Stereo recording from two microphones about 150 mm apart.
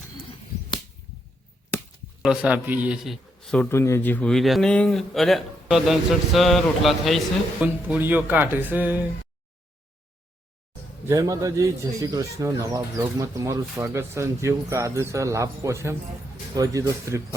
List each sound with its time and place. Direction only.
2.2 s speech: 5° right (ahead or behind)
3.7 s a man's voice: 15° left (ahead or behind); by 7.2 s centre (ahead or behind)
7.6 s speech: 10° right (ahead or behind)
11.0 s speech: 25° right (ahead or behind)